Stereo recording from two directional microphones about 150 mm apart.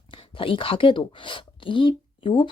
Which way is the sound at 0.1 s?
35° left (ahead or behind).